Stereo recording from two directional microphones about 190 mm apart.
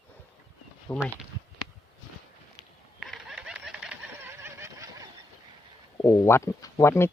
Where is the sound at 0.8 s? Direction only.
10° left (ahead or behind).